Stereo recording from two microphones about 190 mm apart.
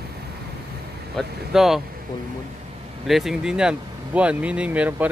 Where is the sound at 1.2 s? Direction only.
Centre (ahead or behind).